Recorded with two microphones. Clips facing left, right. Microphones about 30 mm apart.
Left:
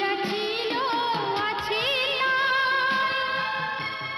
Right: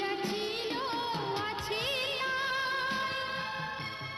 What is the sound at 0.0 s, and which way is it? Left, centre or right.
Music, left.